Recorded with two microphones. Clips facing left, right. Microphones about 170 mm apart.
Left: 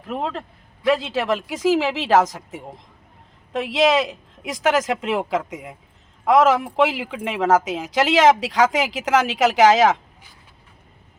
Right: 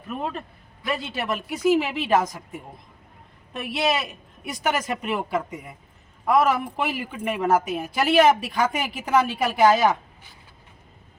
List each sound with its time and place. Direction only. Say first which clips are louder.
0.0 s a man's voice: left 3 dB; 90° left